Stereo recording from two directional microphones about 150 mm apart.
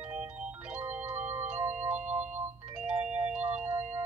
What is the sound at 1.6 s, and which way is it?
Music, 10° right (ahead or behind).